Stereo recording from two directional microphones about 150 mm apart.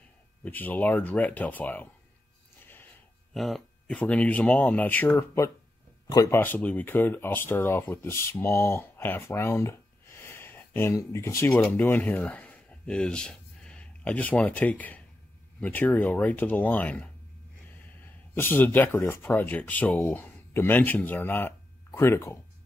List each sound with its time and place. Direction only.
0.4 s speech: 10° left (ahead or behind)
3.3 s speech: centre (ahead or behind); by 6.4 s 25° left (ahead or behind)
6.4 s speech: 10° left (ahead or behind)